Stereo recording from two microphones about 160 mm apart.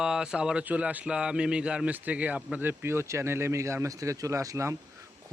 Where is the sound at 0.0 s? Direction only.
5° right (ahead or behind).